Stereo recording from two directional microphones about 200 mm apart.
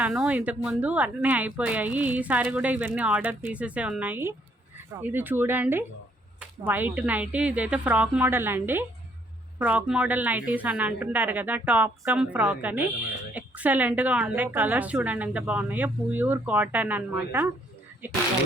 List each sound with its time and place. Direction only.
0.0 s a woman's voice: 5° right (ahead or behind)